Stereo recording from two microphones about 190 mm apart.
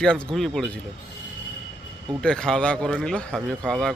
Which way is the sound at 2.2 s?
5° left (ahead or behind).